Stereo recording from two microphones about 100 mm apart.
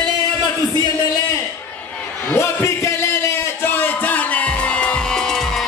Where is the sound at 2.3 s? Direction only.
25° left (ahead or behind).